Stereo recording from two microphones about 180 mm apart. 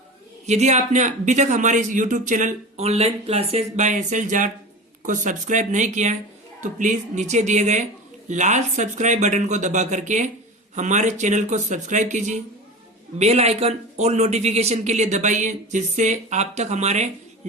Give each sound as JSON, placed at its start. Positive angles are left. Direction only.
{"t": 0.4, "sound": "a man's voice", "side_deg": -40}